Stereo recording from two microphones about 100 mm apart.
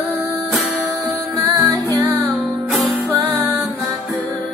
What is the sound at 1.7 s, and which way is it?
Music, 35° right (ahead or behind).